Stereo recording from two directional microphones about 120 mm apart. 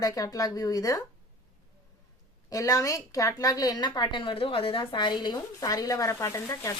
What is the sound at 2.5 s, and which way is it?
A woman's voice, 30° left (ahead or behind).